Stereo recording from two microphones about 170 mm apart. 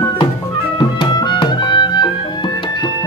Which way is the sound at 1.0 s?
25° left (ahead or behind).